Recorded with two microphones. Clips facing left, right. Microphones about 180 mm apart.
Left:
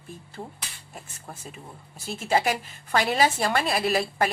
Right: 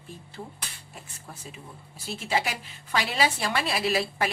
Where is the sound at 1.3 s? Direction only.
50° left (ahead or behind).